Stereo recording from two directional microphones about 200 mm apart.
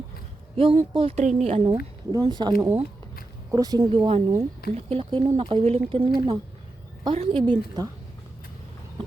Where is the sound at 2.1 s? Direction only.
20° right (ahead or behind).